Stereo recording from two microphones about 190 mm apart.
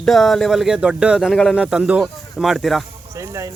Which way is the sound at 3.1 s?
15° right (ahead or behind).